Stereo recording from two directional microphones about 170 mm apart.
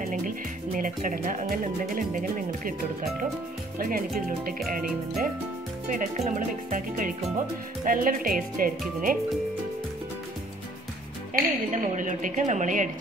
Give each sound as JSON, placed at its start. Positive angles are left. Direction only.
{"t": 0.7, "sound": "speech", "side_deg": -55}
{"t": 5.9, "sound": "speech", "side_deg": -45}
{"t": 11.3, "sound": "speech", "side_deg": -45}